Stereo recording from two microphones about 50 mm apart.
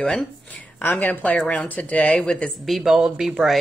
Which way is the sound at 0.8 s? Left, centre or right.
Left.